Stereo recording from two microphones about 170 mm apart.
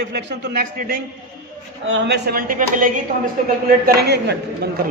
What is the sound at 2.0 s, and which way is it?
Speech, 70° right (ahead or behind).